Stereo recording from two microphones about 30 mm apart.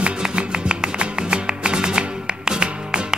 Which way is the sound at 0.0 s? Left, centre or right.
Right.